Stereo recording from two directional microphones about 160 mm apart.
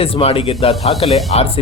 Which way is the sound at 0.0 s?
40° left (ahead or behind).